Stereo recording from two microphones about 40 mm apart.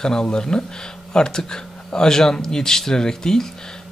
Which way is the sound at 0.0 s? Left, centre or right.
Centre.